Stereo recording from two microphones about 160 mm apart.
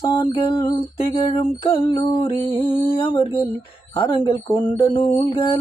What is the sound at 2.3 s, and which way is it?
Music, 15° left (ahead or behind).